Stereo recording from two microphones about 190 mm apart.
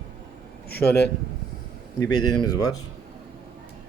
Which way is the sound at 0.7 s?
55° left (ahead or behind).